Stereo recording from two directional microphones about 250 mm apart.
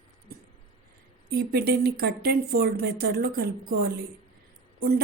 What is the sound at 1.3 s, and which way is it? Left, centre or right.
A woman's voice, right.